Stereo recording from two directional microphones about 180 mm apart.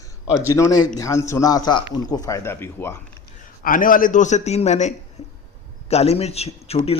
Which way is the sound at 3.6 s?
50° left (ahead or behind).